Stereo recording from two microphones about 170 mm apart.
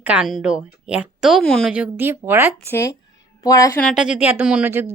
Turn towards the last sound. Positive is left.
turn(degrees=-15)  # may be behind; listen again after turning